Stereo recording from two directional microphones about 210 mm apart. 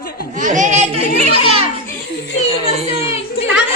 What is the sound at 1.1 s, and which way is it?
Speech, 30° left (ahead or behind).